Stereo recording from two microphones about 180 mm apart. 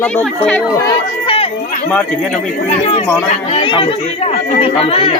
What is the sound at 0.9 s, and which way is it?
Run, 30° left (ahead or behind).